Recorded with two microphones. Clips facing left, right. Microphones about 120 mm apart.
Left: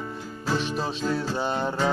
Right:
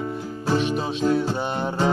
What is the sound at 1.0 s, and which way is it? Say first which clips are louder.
Music: right 7 dB; 20° right (ahead or behind).